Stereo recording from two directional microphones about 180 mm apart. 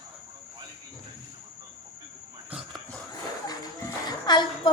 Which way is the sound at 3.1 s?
20° left (ahead or behind).